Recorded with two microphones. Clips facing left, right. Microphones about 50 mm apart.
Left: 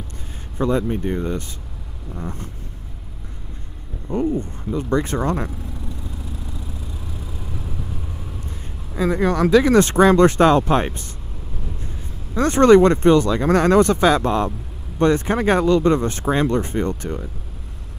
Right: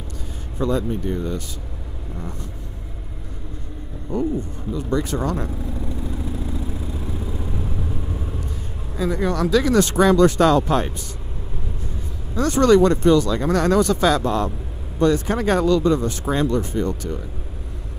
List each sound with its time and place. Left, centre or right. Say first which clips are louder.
0.6 s speech: left 2 dB; left
4.1 s speech: left 2 dB; left
8.9 s speech: left 3 dB; left
12.4 s speech: left 3 dB; left
15.8 s speech: left 2 dB; left